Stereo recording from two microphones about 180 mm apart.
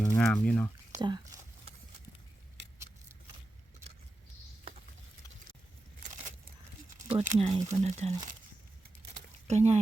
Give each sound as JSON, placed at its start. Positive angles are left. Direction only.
{"t": 0.2, "sound": "speech", "side_deg": 5}
{"t": 0.9, "sound": "speech", "side_deg": -25}
{"t": 7.1, "sound": "speech", "side_deg": -35}
{"t": 9.5, "sound": "speech", "side_deg": -40}